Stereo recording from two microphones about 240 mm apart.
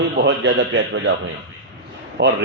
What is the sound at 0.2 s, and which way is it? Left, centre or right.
Speech, right.